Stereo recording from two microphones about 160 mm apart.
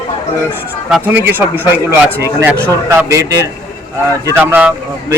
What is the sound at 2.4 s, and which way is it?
A man's voice, 15° right (ahead or behind).